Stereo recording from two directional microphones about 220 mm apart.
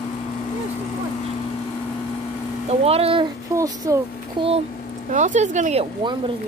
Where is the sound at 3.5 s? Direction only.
15° right (ahead or behind).